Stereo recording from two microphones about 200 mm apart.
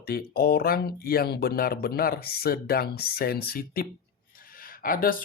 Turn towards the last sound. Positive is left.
turn(degrees=45)  # may be behind; listen again after turning